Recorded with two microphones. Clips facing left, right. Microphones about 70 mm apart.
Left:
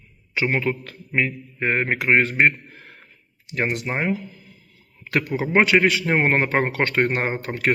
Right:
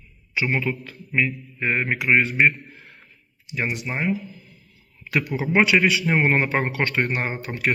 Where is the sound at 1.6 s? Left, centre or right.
Left.